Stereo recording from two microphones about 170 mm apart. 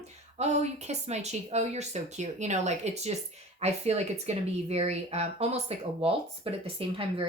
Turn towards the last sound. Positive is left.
turn(degrees=-35)  # may be behind; listen again after turning